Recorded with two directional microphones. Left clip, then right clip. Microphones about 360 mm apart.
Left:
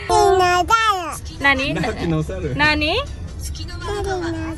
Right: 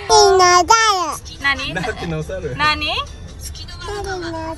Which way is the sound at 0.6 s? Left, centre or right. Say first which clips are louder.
Right 3 dB; centre.